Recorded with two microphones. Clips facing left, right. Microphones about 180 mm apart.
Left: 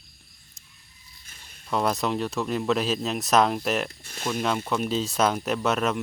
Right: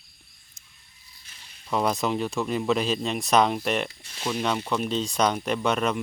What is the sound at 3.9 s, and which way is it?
Speech, 50° left (ahead or behind).